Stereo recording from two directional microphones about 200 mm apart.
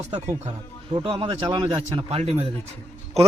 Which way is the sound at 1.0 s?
25° right (ahead or behind).